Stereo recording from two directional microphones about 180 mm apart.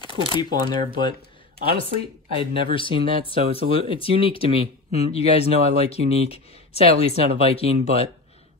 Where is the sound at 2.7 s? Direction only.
30° left (ahead or behind).